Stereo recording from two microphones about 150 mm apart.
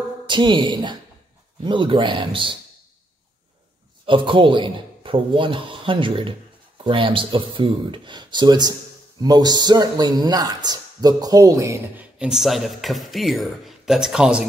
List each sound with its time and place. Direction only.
0.3 s a man's voice: 30° right (ahead or behind)
4.0 s a man's voice: 35° right (ahead or behind)
12.2 s speech: 5° right (ahead or behind)